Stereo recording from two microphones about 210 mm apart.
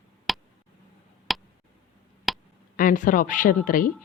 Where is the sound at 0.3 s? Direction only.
Centre (ahead or behind).